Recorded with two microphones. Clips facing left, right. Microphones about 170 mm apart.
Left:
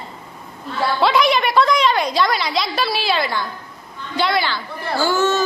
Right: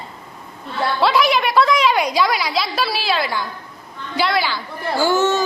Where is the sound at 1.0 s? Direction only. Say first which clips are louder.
Even; 5° right (ahead or behind).